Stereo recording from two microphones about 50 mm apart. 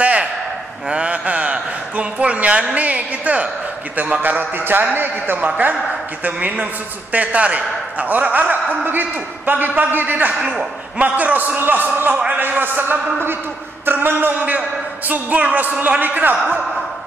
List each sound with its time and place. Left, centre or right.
0.0 s a sound: right
3.9 s a man's voice: right
6.2 s a man's voice: right
10.3 s a man's voice: centre
11.0 s a man's voice: right